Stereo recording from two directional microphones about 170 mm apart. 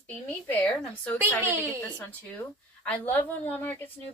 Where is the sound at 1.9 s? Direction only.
10° left (ahead or behind).